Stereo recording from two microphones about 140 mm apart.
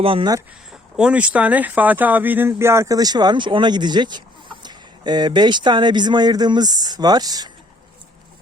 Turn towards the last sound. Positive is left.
turn(degrees=-30)  # may be behind; listen again after turning